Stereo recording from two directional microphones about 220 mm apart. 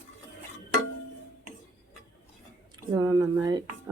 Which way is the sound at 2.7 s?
15° right (ahead or behind).